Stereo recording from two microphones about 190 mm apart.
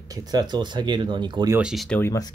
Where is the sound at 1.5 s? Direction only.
Centre (ahead or behind).